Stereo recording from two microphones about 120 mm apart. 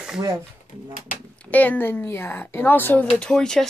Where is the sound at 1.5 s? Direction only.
15° left (ahead or behind).